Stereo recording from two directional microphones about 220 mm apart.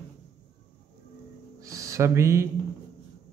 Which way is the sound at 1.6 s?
15° right (ahead or behind).